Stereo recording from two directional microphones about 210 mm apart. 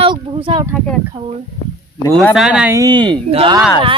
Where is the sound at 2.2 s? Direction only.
5° right (ahead or behind); by 3.6 s 25° right (ahead or behind).